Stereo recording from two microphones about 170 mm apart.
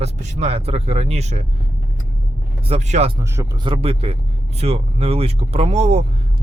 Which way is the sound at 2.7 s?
40° right (ahead or behind).